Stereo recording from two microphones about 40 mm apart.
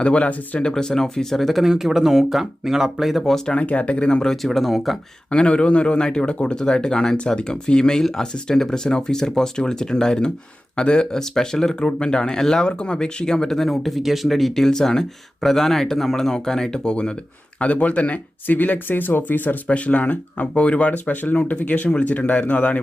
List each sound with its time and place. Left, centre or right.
0.0 s speech: left
0.7 s speech: centre
1.6 s speech: centre
3.5 s speech: left
4.3 s speech: centre
5.3 s speech: left
18.4 s speech: left
19.6 s speech: left